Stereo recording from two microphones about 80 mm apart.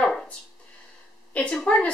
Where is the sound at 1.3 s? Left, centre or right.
Centre.